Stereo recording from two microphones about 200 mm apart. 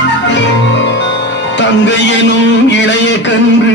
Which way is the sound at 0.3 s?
65° left (ahead or behind).